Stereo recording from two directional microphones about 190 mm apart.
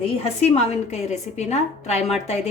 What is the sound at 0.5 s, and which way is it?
A woman's voice, 35° left (ahead or behind).